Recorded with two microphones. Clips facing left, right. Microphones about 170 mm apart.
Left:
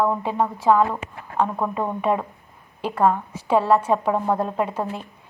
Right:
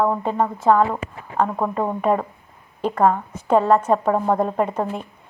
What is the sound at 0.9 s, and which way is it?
Speech, 15° right (ahead or behind).